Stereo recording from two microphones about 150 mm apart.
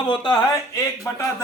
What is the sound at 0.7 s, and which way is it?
Speech, 20° left (ahead or behind).